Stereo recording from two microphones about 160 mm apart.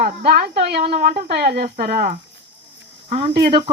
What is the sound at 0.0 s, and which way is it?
A woman's voice, 65° right (ahead or behind).